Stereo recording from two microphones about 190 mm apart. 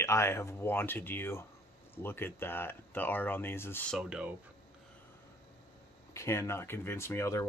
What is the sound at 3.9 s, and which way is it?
Speech, 5° right (ahead or behind).